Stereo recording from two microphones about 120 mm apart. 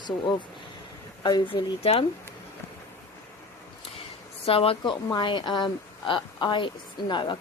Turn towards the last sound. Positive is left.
turn(degrees=40)  # may be behind; listen again after turning